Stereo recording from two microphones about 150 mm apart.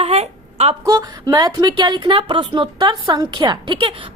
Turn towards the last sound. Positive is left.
turn(degrees=-30)  # may be behind; listen again after turning